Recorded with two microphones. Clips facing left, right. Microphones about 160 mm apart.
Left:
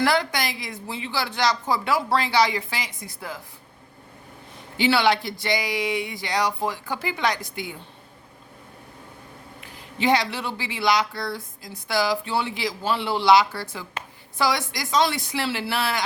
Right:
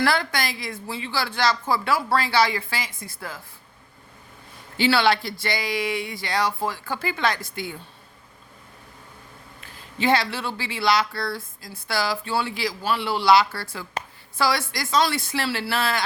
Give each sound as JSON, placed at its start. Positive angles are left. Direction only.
{"t": 0.0, "sound": "speech", "side_deg": 20}
{"t": 4.8, "sound": "speech", "side_deg": 15}
{"t": 9.6, "sound": "speech", "side_deg": 15}